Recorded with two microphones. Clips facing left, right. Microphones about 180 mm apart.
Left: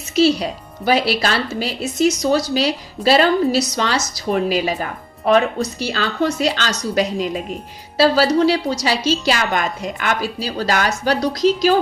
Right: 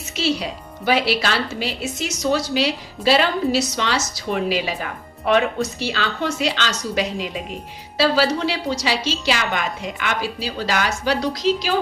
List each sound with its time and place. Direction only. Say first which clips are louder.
0.1 s a woman's voice: left 7 dB; 40° left (ahead or behind)